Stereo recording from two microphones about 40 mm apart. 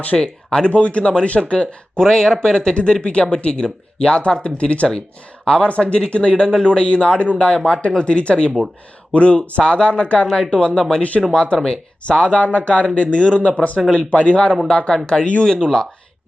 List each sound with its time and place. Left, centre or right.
0.2 s speech: centre
0.7 s speech: left
2.0 s speech: centre
12.0 s speech: left